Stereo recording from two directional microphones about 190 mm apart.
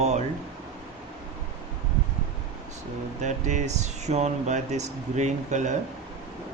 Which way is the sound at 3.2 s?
40° right (ahead or behind).